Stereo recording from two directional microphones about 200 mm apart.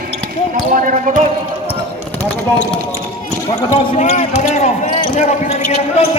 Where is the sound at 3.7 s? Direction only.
35° left (ahead or behind).